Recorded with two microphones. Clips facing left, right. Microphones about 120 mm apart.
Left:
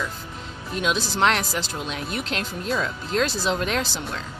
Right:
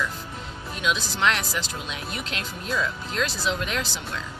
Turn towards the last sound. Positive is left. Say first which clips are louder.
# left 3 dB
turn(degrees=40)  # may be behind; listen again after turning